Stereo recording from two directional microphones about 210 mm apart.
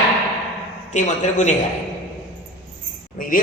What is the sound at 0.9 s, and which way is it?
Speech, 35° left (ahead or behind).